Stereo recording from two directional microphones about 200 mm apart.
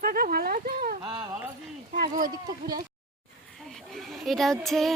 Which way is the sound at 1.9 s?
45° right (ahead or behind).